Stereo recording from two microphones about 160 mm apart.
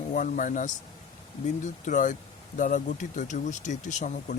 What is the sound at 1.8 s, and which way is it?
Speech, 50° left (ahead or behind).